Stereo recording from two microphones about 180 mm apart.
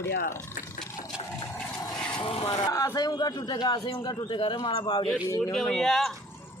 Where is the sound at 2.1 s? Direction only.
30° left (ahead or behind).